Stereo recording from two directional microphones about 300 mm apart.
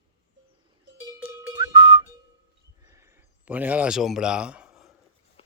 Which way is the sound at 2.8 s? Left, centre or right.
Centre.